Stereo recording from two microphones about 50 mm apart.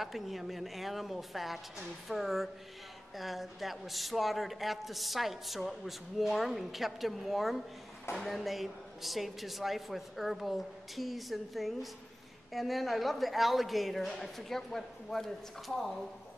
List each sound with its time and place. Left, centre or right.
0.0 s speech: centre